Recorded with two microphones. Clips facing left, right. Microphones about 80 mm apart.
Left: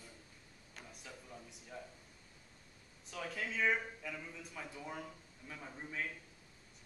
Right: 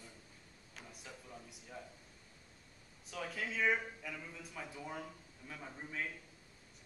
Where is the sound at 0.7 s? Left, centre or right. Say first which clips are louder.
Even; centre.